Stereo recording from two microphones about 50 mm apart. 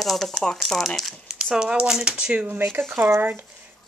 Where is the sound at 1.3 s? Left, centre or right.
Centre.